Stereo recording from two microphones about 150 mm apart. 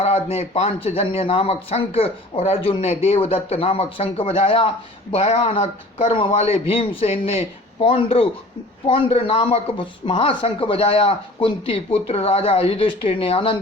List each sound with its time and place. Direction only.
0.0 s a man's voice: 45° left (ahead or behind)